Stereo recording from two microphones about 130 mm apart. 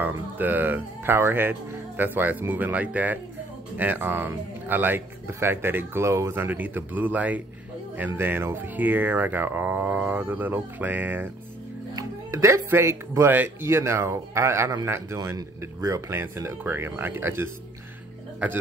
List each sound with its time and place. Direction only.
0.0 s speech: 15° right (ahead or behind)
11.9 s speech: 25° right (ahead or behind)